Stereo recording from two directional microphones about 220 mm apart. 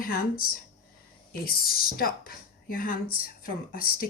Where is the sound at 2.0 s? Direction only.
40° left (ahead or behind).